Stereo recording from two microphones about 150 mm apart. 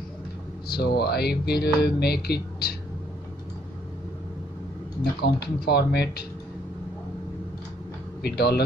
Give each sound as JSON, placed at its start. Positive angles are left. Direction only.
{"t": 0.7, "sound": "speech", "side_deg": 90}
{"t": 5.2, "sound": "speech", "side_deg": 90}
{"t": 8.2, "sound": "speech", "side_deg": 90}